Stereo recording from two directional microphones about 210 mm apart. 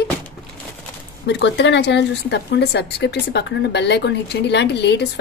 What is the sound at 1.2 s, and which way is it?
Speech, 55° left (ahead or behind).